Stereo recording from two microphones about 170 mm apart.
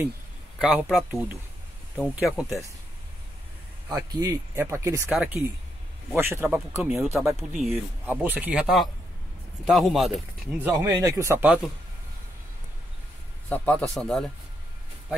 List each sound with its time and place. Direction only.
0.6 s speech: 5° right (ahead or behind)
3.9 s speech: 20° right (ahead or behind); by 10.2 s centre (ahead or behind)
10.6 s speech: 15° right (ahead or behind)
13.5 s a man's voice: 10° left (ahead or behind)